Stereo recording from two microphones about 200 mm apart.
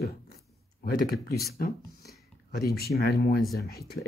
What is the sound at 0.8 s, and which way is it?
Speech, 50° left (ahead or behind).